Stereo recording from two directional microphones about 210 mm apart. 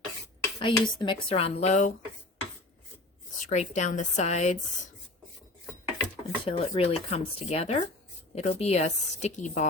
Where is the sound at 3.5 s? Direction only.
35° left (ahead or behind).